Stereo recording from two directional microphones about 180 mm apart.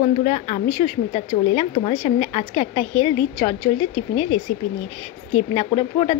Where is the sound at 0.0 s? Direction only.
40° left (ahead or behind).